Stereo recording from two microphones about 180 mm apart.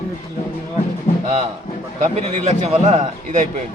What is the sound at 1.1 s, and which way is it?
Music, 35° left (ahead or behind).